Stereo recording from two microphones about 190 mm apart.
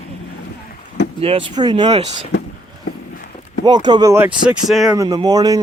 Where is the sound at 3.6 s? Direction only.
25° right (ahead or behind); by 4.9 s centre (ahead or behind).